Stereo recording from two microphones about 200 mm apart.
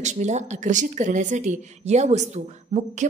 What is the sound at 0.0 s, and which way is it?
A woman's voice, 35° right (ahead or behind).